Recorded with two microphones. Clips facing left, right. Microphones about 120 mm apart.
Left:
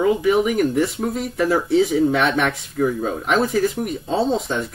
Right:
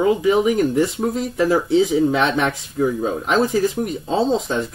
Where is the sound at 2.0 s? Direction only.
25° right (ahead or behind).